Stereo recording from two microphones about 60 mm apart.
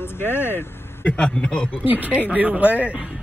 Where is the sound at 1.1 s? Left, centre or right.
Left.